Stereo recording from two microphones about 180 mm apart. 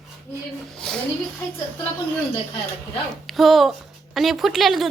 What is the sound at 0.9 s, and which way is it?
Speech, 5° left (ahead or behind).